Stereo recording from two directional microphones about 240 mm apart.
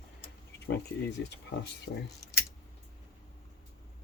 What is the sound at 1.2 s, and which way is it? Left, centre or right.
Speech, left.